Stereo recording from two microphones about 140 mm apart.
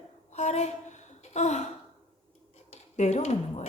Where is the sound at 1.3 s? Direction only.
55° left (ahead or behind).